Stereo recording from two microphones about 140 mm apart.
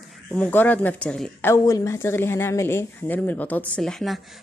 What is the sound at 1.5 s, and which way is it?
Speech, 20° left (ahead or behind).